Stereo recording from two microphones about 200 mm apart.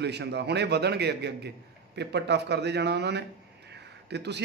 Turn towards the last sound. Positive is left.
turn(degrees=-60)  # may be behind; listen again after turning